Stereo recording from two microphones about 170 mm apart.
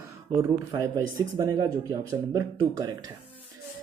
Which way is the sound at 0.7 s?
25° right (ahead or behind).